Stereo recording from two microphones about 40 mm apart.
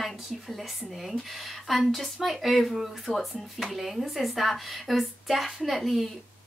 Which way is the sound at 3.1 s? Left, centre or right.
Left.